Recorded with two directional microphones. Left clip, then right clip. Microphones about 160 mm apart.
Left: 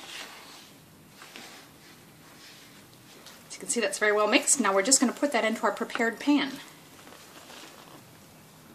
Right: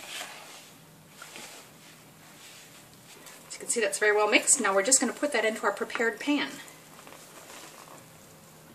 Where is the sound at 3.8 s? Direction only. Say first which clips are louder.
Even; 40° left (ahead or behind).